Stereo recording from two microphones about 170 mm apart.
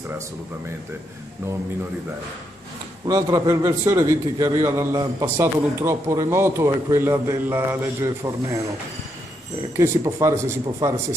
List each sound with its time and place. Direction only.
3.1 s a man's voice: 20° right (ahead or behind)
9.8 s a man's voice: 15° right (ahead or behind)